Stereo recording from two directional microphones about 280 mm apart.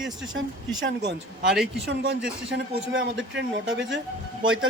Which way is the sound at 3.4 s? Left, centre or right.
Right.